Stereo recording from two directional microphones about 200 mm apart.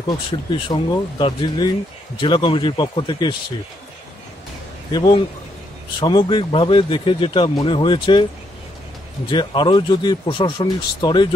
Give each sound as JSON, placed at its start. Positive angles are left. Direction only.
{"t": 0.0, "sound": "speech", "side_deg": 25}
{"t": 4.9, "sound": "speech", "side_deg": 20}